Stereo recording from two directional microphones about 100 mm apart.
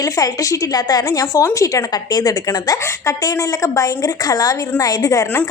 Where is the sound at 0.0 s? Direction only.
35° left (ahead or behind).